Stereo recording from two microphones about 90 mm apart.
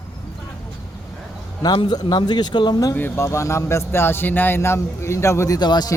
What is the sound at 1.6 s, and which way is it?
Speech, 55° left (ahead or behind).